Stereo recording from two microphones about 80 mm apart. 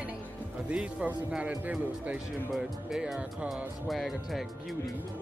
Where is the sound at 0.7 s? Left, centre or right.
Centre.